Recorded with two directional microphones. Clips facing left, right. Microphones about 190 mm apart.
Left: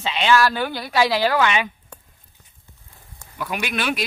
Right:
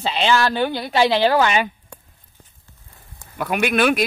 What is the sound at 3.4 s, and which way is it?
Speech, 55° right (ahead or behind).